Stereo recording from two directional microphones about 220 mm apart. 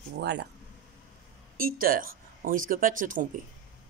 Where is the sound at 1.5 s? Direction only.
40° right (ahead or behind).